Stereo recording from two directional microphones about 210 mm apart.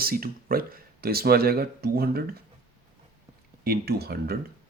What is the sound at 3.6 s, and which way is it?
Speech, 45° right (ahead or behind).